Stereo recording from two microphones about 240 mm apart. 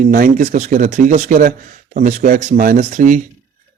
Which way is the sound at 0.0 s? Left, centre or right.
Right.